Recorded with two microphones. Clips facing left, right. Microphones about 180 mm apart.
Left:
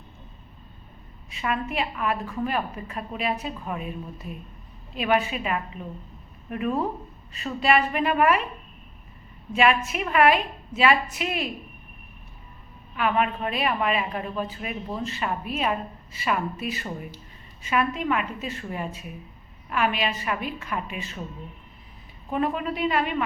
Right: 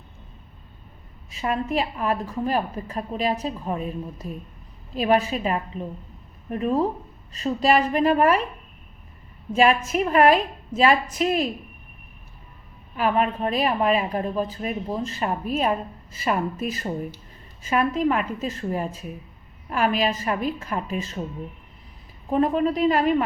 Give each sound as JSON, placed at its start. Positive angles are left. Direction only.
{"t": 1.4, "sound": "speech", "side_deg": -40}
{"t": 9.6, "sound": "speech", "side_deg": -40}
{"t": 13.0, "sound": "speech", "side_deg": -35}
{"t": 22.3, "sound": "speech", "side_deg": -35}